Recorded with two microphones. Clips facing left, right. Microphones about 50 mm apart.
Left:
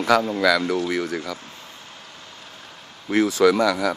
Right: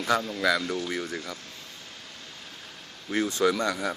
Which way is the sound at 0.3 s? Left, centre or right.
Left.